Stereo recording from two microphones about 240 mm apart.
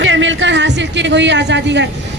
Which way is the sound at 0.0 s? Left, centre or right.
Right.